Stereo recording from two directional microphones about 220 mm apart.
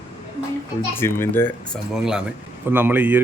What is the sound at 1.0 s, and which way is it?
Speech, 10° left (ahead or behind).